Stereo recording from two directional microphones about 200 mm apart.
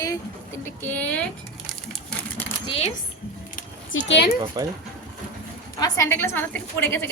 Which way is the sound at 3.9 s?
75° left (ahead or behind).